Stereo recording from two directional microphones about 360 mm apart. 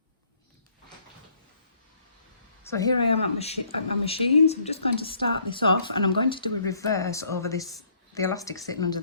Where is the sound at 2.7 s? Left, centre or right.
Centre.